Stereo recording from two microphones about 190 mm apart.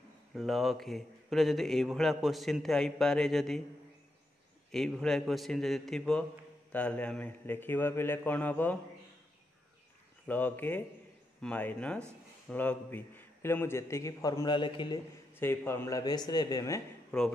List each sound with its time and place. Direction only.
0.3 s a man's voice: centre (ahead or behind)
4.6 s a man's voice: centre (ahead or behind)
10.2 s a man's voice: 10° left (ahead or behind); by 15.0 s 25° left (ahead or behind)
15.3 s a man's voice: 10° left (ahead or behind)
17.1 s a man's voice: 5° left (ahead or behind)